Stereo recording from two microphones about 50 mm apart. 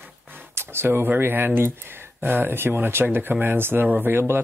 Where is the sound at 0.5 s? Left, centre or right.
Right.